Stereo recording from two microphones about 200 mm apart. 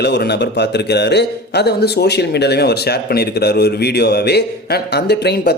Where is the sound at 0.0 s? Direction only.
55° left (ahead or behind).